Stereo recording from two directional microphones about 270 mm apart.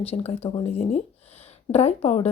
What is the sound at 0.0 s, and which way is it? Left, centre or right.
Speech, left.